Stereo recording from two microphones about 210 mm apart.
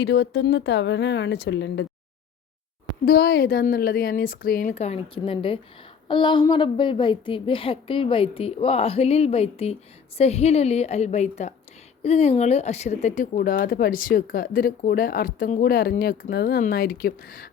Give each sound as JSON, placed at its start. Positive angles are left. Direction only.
{"t": 0.0, "sound": "a woman's voice", "side_deg": 55}
{"t": 3.1, "sound": "a woman's voice", "side_deg": 50}